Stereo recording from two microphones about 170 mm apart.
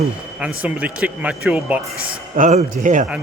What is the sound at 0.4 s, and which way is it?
Speech, 10° right (ahead or behind).